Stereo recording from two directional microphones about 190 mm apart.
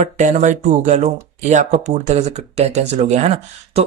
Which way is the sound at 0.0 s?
40° right (ahead or behind).